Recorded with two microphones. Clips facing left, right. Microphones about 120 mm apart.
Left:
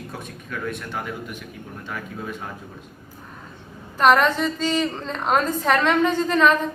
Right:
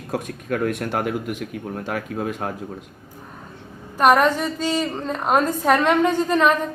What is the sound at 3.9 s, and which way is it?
A woman's voice, 15° right (ahead or behind).